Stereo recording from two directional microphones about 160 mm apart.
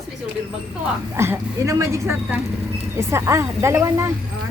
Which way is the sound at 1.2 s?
20° right (ahead or behind).